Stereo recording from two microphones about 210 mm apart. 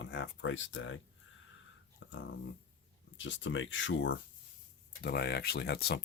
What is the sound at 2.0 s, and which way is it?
Dog, 60° left (ahead or behind).